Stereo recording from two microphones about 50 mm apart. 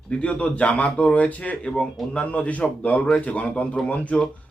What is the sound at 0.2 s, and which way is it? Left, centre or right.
Speech, left.